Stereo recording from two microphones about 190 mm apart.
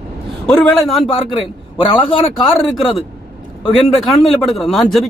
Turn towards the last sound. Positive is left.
turn(degrees=0)  # may be behind; listen again after turning